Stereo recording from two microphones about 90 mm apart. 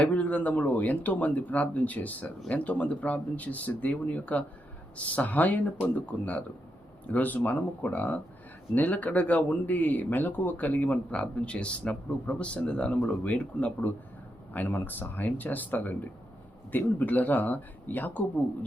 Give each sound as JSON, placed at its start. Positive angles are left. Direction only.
{"t": 0.0, "sound": "speech", "side_deg": 15}